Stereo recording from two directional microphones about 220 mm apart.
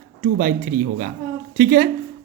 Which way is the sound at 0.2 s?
40° right (ahead or behind).